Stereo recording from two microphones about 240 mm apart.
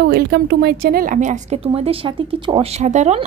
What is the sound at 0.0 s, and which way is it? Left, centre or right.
Speech, right.